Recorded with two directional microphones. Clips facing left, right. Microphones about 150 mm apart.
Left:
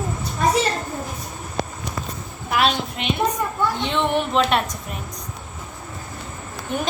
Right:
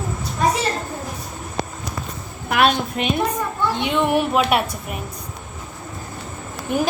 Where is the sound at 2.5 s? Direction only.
55° right (ahead or behind).